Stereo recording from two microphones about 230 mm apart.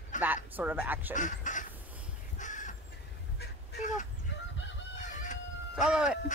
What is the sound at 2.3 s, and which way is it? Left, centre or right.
Crow, left.